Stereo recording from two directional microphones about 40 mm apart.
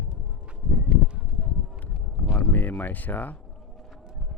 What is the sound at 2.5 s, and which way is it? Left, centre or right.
Speech, left.